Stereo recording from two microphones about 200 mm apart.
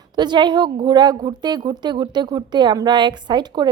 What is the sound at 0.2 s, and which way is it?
A woman's voice, 20° right (ahead or behind).